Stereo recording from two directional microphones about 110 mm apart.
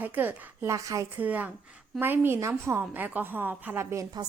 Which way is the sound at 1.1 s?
15° right (ahead or behind).